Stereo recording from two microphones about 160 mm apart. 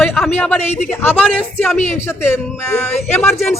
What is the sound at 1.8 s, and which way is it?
Speech, 45° left (ahead or behind).